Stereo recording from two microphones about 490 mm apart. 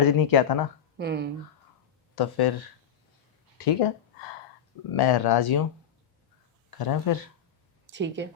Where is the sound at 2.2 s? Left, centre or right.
Left.